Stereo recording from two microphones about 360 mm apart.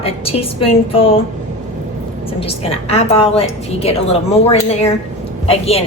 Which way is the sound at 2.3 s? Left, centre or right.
Centre.